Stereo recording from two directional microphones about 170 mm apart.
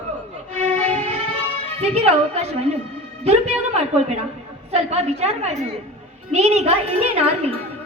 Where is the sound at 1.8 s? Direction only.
40° right (ahead or behind).